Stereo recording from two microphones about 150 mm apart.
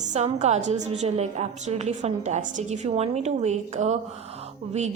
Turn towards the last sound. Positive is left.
turn(degrees=-45)  # may be behind; listen again after turning